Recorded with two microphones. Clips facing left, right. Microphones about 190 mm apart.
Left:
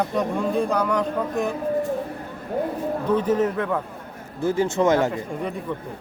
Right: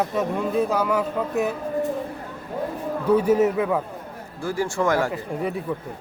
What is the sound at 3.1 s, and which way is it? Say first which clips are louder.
Speech: right 3 dB; 10° right (ahead or behind).